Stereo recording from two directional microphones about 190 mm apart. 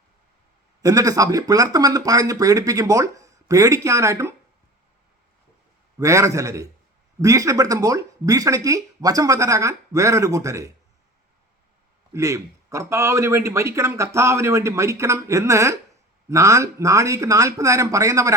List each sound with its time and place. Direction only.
0.8 s speech: 20° right (ahead or behind)
6.0 s speech: 15° right (ahead or behind)
12.1 s speech: 15° right (ahead or behind)